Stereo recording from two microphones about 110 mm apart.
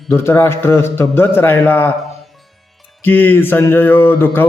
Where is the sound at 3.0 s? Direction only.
15° left (ahead or behind).